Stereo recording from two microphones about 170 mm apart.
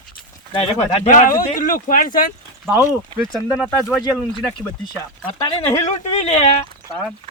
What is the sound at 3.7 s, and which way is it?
Speech, 15° left (ahead or behind).